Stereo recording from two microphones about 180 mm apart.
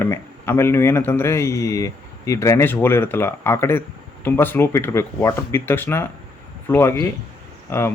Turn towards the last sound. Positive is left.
turn(degrees=15)  # may be behind; listen again after turning